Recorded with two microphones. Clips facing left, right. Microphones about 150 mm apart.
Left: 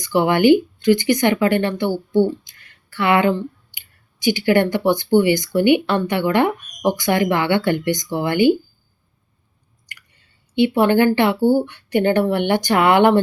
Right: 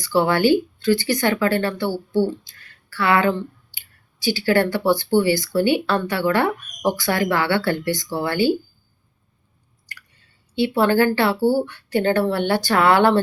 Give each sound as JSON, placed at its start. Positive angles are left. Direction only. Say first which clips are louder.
{"t": 0.0, "sound": "speech", "louder": "left 2 dB", "side_deg": 15}
{"t": 9.9, "sound": "squish", "louder": "right 1 dB", "side_deg": 20}
{"t": 10.5, "sound": "speech", "louder": "left 3 dB", "side_deg": 20}